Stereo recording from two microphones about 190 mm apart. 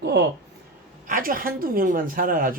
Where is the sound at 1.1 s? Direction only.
45° right (ahead or behind).